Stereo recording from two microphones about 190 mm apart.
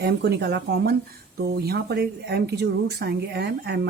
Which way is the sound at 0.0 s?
60° right (ahead or behind).